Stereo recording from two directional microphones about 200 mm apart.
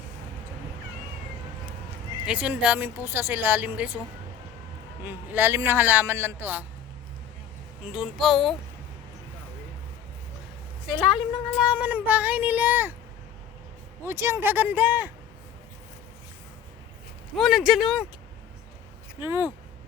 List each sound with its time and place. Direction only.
2.2 s speech: 5° right (ahead or behind)
5.0 s speech: 10° right (ahead or behind)
7.9 s speech: centre (ahead or behind)
10.9 s speech: 25° left (ahead or behind)
11.7 s speech: 10° right (ahead or behind)
14.0 s speech: 10° right (ahead or behind)
17.3 s speech: centre (ahead or behind)
19.2 s speech: 10° right (ahead or behind)